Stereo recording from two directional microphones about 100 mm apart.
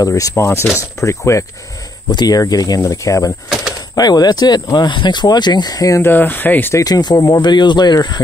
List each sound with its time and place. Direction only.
0.0 s speech: 30° left (ahead or behind)
2.0 s speech: 45° left (ahead or behind)
6.1 s speech: 20° left (ahead or behind)
6.7 s speech: 40° left (ahead or behind)
7.4 s speech: 50° left (ahead or behind)